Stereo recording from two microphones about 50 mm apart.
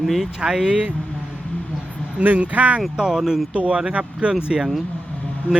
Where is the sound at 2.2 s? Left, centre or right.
Right.